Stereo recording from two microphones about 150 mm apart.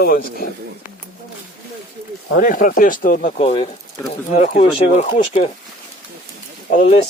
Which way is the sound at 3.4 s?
40° left (ahead or behind).